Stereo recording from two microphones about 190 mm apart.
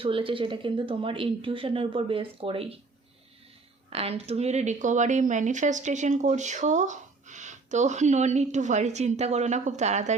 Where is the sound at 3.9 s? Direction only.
30° right (ahead or behind).